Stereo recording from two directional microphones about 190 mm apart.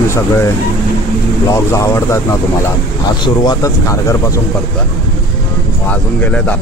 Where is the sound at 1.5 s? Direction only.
15° left (ahead or behind).